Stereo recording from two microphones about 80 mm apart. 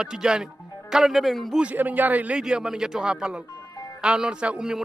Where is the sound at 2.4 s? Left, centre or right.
Centre.